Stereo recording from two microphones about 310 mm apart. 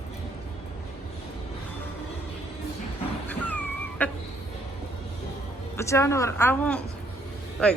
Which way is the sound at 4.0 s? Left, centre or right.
Centre.